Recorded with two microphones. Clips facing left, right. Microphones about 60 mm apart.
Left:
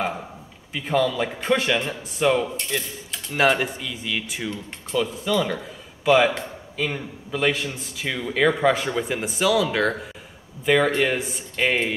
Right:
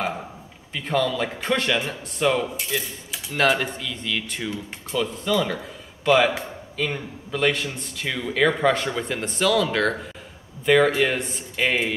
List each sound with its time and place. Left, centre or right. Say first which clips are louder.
0.7 s speech: left 1 dB; centre